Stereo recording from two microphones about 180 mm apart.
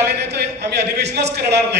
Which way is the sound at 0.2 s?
70° right (ahead or behind).